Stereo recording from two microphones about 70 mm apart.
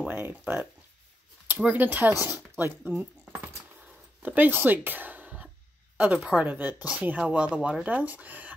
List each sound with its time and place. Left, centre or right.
0.1 s speech: right
1.7 s speech: right
2.9 s a sound: right
4.2 s a woman's voice: right